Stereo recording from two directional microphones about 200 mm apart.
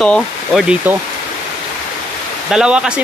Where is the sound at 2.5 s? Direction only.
5° right (ahead or behind).